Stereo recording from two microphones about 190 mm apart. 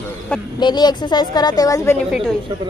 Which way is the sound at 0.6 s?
20° left (ahead or behind).